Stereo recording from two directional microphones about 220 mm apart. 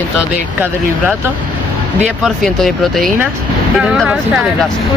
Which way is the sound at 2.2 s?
Centre (ahead or behind).